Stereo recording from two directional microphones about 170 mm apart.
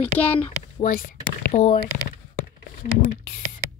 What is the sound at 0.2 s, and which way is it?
Speech, 10° left (ahead or behind).